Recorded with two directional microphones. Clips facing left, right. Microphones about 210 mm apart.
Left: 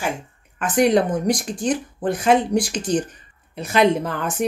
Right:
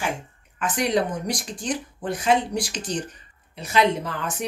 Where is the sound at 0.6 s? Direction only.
50° left (ahead or behind).